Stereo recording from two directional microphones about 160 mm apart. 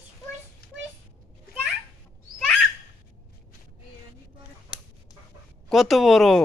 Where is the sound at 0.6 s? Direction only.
75° left (ahead or behind).